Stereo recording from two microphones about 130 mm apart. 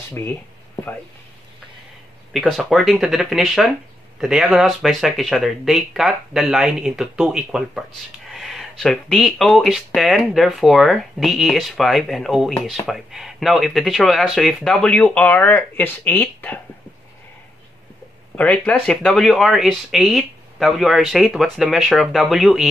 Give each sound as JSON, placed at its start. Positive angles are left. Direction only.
{"t": 0.2, "sound": "speech", "side_deg": 20}
{"t": 2.3, "sound": "speech", "side_deg": 0}
{"t": 18.3, "sound": "speech", "side_deg": 10}